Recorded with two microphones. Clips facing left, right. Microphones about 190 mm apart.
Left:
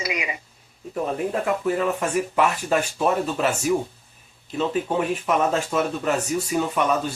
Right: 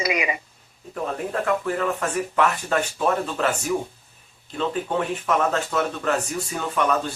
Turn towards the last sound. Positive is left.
turn(degrees=10)  # may be behind; listen again after turning